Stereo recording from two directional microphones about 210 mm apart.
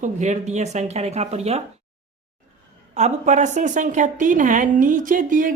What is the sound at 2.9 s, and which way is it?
A woman's voice, 35° right (ahead or behind).